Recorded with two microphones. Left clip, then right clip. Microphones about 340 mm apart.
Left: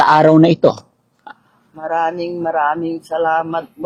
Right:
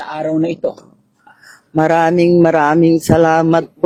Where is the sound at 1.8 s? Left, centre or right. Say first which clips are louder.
Right 7 dB; right.